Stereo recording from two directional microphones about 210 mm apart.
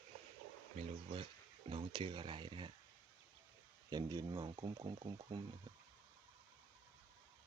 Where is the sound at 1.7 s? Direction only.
25° right (ahead or behind).